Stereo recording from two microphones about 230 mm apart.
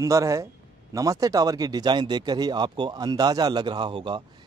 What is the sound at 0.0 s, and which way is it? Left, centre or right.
Speech, centre.